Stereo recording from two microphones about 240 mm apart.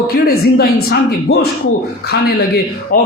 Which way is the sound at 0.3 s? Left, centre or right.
Left.